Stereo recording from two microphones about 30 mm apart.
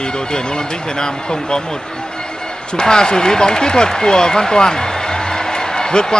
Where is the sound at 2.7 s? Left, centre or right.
Left.